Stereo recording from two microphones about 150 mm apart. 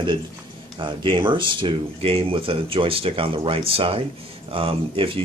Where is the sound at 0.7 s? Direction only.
35° right (ahead or behind).